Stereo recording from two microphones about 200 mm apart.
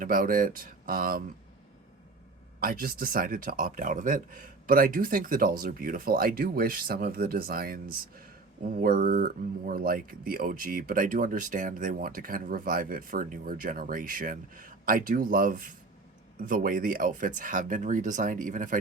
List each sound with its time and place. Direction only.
0.0 s speech: 45° right (ahead or behind)
2.6 s speech: 45° right (ahead or behind)